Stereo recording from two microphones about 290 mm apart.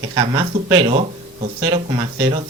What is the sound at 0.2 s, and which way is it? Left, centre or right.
Speech, centre.